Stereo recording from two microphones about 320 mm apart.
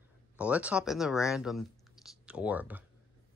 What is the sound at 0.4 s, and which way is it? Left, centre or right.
Speech, centre.